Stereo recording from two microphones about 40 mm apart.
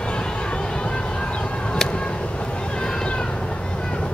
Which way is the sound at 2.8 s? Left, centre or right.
Left.